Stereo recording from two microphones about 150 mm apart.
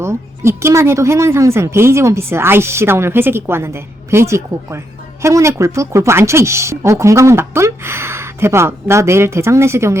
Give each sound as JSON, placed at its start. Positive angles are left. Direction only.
{"t": 0.0, "sound": "speech", "side_deg": -20}